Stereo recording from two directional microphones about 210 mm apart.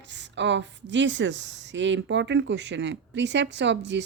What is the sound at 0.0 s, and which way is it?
A woman's voice, 55° right (ahead or behind).